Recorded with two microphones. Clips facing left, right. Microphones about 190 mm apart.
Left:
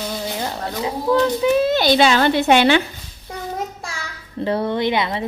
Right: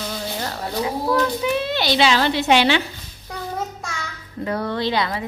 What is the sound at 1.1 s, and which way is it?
A woman's voice, 40° left (ahead or behind).